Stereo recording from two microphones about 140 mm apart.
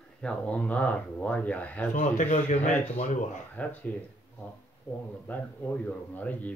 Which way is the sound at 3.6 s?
10° left (ahead or behind).